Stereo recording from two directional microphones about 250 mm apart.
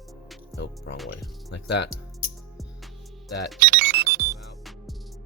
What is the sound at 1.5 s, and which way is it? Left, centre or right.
Speech, left.